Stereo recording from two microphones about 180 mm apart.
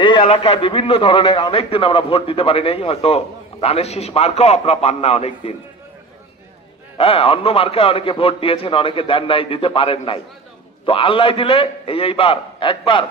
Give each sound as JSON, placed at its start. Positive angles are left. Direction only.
{"t": 0.0, "sound": "a man's voice", "side_deg": 30}
{"t": 7.0, "sound": "a man's voice", "side_deg": 30}